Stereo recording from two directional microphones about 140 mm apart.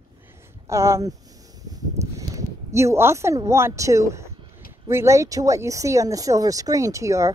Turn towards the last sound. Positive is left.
turn(degrees=-20)  # may be behind; listen again after turning